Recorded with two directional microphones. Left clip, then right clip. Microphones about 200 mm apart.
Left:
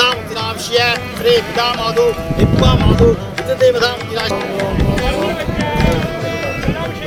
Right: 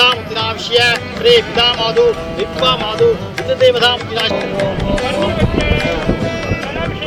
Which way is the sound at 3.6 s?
15° left (ahead or behind).